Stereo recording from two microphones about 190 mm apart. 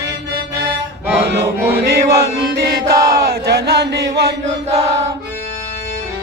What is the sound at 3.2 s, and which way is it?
Chant, 55° right (ahead or behind).